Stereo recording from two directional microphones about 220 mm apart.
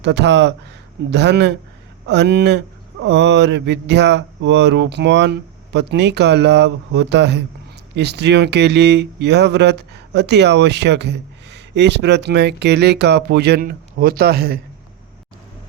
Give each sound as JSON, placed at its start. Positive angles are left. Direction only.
{"t": 0.0, "sound": "speech", "side_deg": -50}